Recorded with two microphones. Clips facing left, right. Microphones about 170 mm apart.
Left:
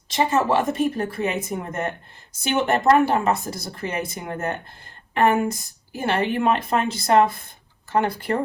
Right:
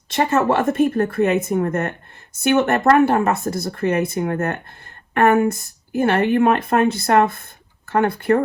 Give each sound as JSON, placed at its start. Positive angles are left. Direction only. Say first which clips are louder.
{"t": 0.1, "sound": "speech", "louder": "right 2 dB", "side_deg": -60}